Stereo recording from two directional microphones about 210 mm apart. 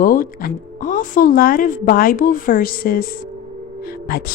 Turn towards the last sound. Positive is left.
turn(degrees=45)  # may be behind; listen again after turning